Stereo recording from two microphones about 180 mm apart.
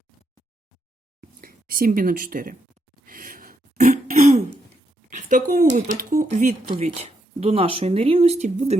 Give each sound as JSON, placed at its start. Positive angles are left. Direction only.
{"t": 1.2, "sound": "speech", "side_deg": -50}
{"t": 3.1, "sound": "throat clearing", "side_deg": -50}
{"t": 5.0, "sound": "a sound", "side_deg": -45}
{"t": 5.7, "sound": "speech", "side_deg": -50}
{"t": 6.2, "sound": "speech", "side_deg": -40}